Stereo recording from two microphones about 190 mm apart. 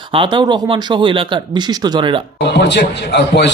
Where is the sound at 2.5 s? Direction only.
65° left (ahead or behind).